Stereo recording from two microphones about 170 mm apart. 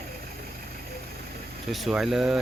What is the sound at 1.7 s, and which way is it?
Speech, centre (ahead or behind).